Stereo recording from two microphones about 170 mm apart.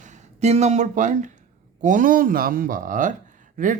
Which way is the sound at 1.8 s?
50° right (ahead or behind).